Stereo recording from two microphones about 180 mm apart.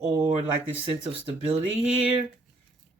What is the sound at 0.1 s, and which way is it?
Speech, 25° right (ahead or behind).